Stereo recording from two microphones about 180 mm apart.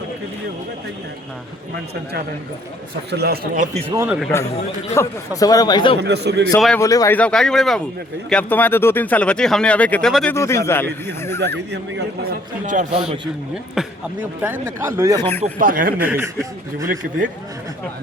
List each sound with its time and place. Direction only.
3.1 s a man's voice: 65° right (ahead or behind); by 3.8 s 45° right (ahead or behind)
3.8 s speech: 10° right (ahead or behind)
4.9 s speech: 20° left (ahead or behind)
6.0 s speech: 65° right (ahead or behind)
6.7 s speech: 20° left (ahead or behind)
7.2 s speech: 5° left (ahead or behind)
10.3 s speech: 15° left (ahead or behind)
11.3 s speech: 70° right (ahead or behind)
12.6 s a man's voice: 45° right (ahead or behind)
13.8 s speech: 5° right (ahead or behind)
15.2 s speech: 10° left (ahead or behind)
15.5 s a man's voice: 50° right (ahead or behind)
16.0 s speech: 10° right (ahead or behind)
16.8 s a man's voice: 50° right (ahead or behind)